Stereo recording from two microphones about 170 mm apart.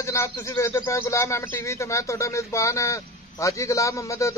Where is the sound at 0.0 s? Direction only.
15° left (ahead or behind).